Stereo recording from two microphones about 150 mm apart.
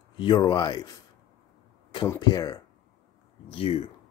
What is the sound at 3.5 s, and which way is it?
Speech, 40° left (ahead or behind).